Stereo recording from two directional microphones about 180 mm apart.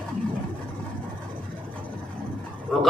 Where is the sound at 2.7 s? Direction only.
Centre (ahead or behind).